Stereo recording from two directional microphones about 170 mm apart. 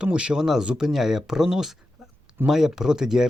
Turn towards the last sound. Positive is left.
turn(degrees=-5)  # may be behind; listen again after turning